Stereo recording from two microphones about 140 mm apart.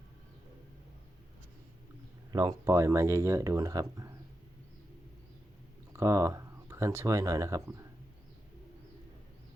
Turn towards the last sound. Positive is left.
turn(degrees=-20)  # may be behind; listen again after turning